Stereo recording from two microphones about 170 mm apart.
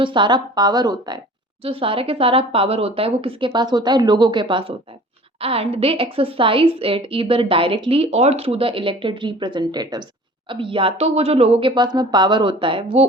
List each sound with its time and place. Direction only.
0.0 s a woman's voice: 30° right (ahead or behind)